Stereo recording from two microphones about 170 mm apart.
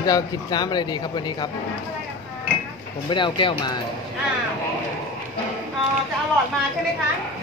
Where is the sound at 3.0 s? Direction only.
30° left (ahead or behind).